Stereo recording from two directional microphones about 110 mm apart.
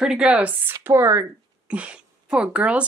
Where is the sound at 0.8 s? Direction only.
25° right (ahead or behind).